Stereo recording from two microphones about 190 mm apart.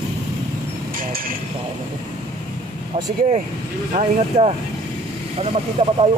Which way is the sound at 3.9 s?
35° right (ahead or behind).